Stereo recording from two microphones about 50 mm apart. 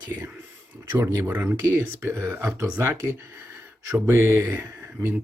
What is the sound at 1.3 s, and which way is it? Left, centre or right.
Speech, right.